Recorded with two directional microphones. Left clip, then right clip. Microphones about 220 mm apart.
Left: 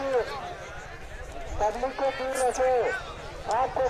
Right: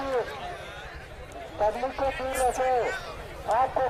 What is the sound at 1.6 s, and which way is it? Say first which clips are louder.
Speech: even; 50° right (ahead or behind).